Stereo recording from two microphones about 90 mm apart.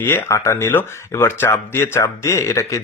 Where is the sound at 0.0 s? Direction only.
25° left (ahead or behind).